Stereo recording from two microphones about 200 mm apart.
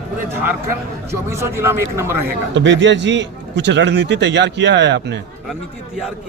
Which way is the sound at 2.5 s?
65° right (ahead or behind).